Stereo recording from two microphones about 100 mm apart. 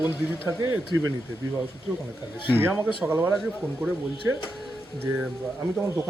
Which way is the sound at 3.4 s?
Centre (ahead or behind).